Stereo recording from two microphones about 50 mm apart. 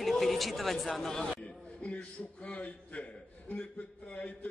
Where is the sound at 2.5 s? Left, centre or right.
Left.